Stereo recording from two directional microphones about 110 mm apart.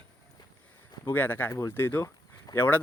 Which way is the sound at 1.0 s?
15° left (ahead or behind).